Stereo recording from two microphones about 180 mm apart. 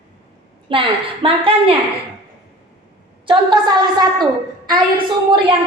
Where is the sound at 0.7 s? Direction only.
30° right (ahead or behind).